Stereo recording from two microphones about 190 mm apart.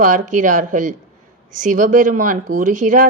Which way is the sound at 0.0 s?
40° right (ahead or behind).